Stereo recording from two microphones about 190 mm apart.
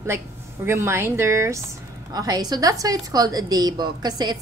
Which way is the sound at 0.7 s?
15° right (ahead or behind).